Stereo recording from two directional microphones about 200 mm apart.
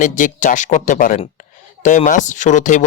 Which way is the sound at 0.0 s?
40° left (ahead or behind).